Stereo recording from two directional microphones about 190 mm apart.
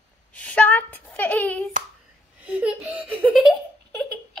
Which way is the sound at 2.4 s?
5° right (ahead or behind).